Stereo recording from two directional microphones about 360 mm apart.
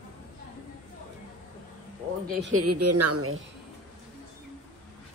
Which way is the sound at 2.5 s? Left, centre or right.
Right.